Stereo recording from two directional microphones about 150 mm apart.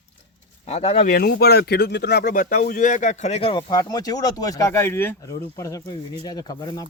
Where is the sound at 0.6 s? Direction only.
40° left (ahead or behind).